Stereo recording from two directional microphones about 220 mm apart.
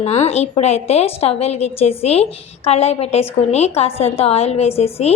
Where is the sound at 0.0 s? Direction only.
30° left (ahead or behind).